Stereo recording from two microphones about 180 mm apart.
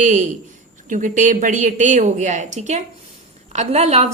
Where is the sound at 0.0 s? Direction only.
45° right (ahead or behind).